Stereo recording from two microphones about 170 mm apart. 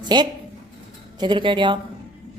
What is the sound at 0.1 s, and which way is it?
Speech, 25° right (ahead or behind).